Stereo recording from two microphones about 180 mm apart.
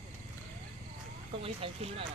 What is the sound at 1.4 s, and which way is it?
Speech, 30° right (ahead or behind).